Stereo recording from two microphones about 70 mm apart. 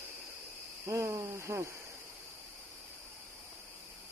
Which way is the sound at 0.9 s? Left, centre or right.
Right.